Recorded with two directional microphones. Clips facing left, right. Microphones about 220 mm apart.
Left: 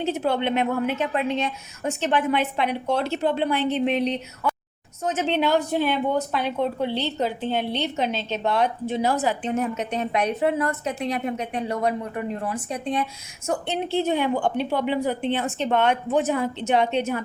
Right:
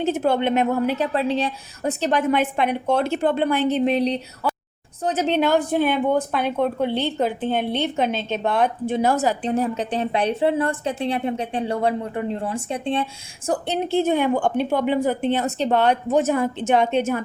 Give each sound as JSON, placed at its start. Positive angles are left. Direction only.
{"t": 0.0, "sound": "a woman's voice", "side_deg": -50}
{"t": 13.5, "sound": "a woman's voice", "side_deg": -40}